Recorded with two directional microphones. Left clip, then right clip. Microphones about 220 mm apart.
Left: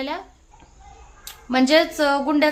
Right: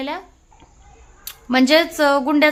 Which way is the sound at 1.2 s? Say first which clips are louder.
Right 3 dB; 15° right (ahead or behind).